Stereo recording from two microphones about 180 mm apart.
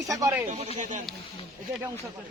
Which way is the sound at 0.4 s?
35° right (ahead or behind).